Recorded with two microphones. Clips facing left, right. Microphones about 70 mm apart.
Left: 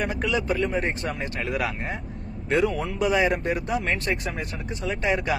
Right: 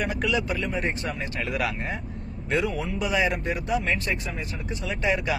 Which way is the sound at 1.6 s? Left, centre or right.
Centre.